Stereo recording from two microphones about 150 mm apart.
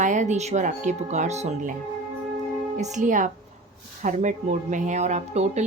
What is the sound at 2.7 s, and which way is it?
A woman's voice, 55° right (ahead or behind).